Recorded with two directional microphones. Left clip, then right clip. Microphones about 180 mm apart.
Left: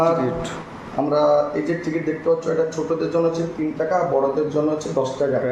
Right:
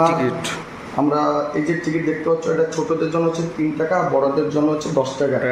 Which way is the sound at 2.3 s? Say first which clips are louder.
Left 1 dB; 50° right (ahead or behind).